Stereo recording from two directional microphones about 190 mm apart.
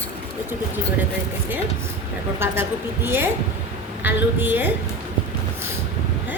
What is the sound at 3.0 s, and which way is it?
A woman's voice, 10° right (ahead or behind).